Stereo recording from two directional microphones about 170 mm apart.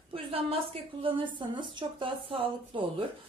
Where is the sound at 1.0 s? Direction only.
30° right (ahead or behind).